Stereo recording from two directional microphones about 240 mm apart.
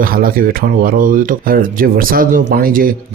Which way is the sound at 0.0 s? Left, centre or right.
Right.